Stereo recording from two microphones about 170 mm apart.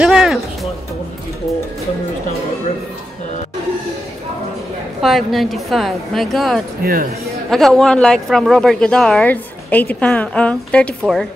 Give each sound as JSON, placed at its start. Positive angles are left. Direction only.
{"t": 0.0, "sound": "music", "side_deg": -5}
{"t": 5.0, "sound": "a woman's voice", "side_deg": 0}
{"t": 6.8, "sound": "speech", "side_deg": -60}
{"t": 7.4, "sound": "a woman's voice", "side_deg": 0}